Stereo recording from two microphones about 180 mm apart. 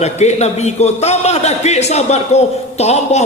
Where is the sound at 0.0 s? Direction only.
40° left (ahead or behind).